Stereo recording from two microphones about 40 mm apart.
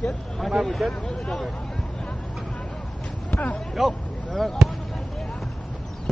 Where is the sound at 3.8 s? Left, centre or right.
Centre.